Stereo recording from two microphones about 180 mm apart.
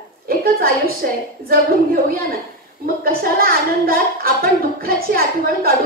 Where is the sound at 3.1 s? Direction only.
55° right (ahead or behind).